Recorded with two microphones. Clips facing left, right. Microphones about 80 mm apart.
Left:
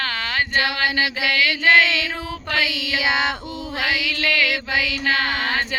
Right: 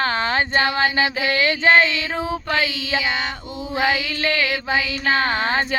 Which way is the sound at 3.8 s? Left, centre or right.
Right.